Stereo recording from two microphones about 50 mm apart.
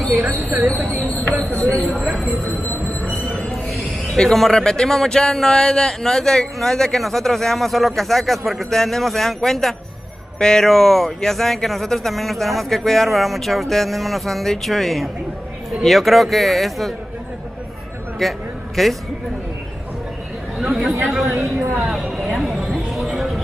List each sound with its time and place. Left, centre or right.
0.2 s speech: right
4.2 s speech: centre
18.2 s speech: centre
20.5 s speech: centre
21.7 s a sound: centre